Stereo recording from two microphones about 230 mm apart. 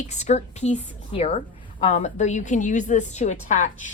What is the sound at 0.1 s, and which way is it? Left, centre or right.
A woman's voice, left.